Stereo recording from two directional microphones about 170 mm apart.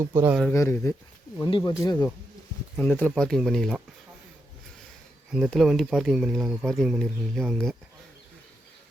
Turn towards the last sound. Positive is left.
turn(degrees=0)  # may be behind; listen again after turning